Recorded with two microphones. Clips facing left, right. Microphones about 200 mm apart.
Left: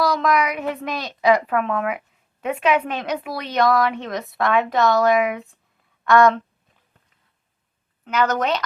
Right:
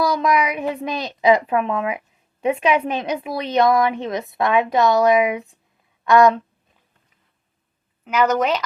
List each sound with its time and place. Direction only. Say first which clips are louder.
0.2 s a woman's voice: right 1 dB; 15° right (ahead or behind)
8.0 s speech: right 2 dB; 5° right (ahead or behind)